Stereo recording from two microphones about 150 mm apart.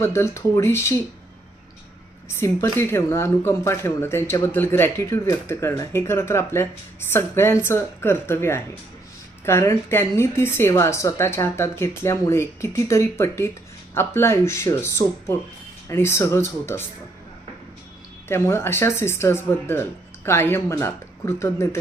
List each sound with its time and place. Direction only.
0.0 s a woman's voice: 15° left (ahead or behind)
2.3 s a woman's voice: 15° left (ahead or behind)
18.3 s a woman's voice: 15° left (ahead or behind)